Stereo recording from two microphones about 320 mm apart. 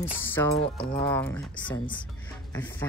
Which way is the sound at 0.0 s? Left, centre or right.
Centre.